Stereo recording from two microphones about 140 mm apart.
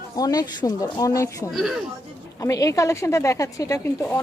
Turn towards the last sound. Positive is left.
turn(degrees=20)  # may be behind; listen again after turning